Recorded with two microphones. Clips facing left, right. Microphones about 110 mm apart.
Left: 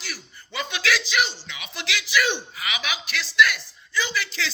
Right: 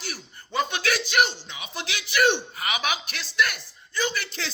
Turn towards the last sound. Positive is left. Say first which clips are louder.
# even
turn(degrees=-50)  # may be behind; listen again after turning